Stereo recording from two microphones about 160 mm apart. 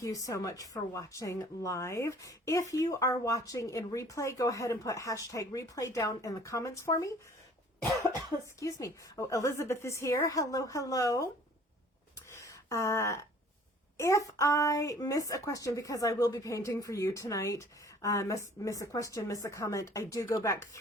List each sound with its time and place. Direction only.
0.0 s a woman's voice: 20° left (ahead or behind)
8.6 s a woman's voice: 20° left (ahead or behind)
12.3 s a sound: 20° left (ahead or behind)
13.9 s a woman's voice: 20° left (ahead or behind)